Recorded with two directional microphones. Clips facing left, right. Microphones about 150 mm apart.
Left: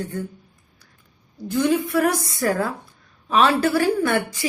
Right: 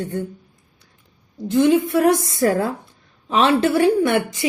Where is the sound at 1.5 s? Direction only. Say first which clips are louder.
Right 4 dB; 25° right (ahead or behind).